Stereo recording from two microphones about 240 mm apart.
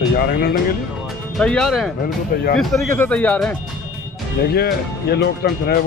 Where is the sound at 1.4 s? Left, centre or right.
Centre.